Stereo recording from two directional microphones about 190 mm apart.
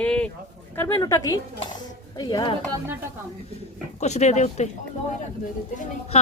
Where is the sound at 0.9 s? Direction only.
20° left (ahead or behind).